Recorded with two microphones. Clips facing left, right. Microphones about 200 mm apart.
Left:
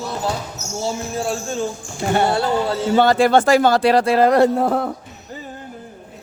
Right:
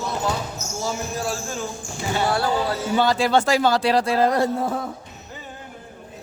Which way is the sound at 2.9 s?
55° left (ahead or behind).